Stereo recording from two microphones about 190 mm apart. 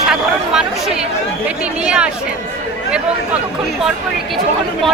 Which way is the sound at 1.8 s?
5° right (ahead or behind).